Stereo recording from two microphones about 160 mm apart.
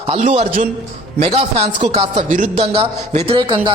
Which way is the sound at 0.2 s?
50° right (ahead or behind).